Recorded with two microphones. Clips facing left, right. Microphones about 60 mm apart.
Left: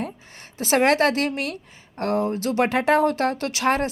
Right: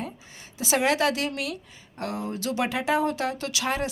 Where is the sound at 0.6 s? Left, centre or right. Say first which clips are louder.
Left 5 dB; left.